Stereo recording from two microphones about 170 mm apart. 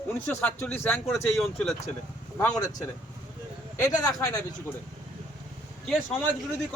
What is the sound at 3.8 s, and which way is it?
Speech, 20° left (ahead or behind).